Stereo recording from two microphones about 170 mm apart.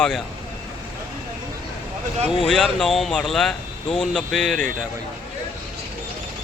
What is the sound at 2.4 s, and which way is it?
Speech, centre (ahead or behind).